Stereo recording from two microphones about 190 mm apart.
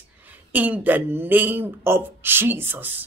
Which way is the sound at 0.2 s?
10° right (ahead or behind).